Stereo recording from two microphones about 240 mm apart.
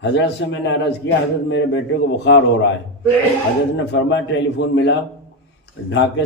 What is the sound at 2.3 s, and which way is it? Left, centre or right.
Speech, left.